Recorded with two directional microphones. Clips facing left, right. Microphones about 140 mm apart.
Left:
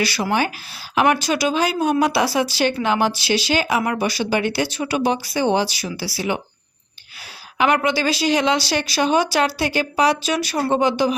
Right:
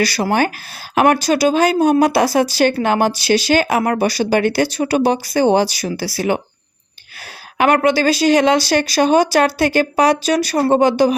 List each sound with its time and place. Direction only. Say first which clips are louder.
0.0 s speech: right 4 dB; 40° right (ahead or behind)
7.6 s speech: right 5 dB; 50° right (ahead or behind)